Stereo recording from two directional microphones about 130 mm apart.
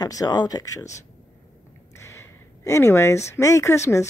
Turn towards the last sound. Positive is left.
turn(degrees=20)  # may be behind; listen again after turning